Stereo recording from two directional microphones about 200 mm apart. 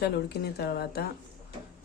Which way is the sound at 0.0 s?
55° left (ahead or behind).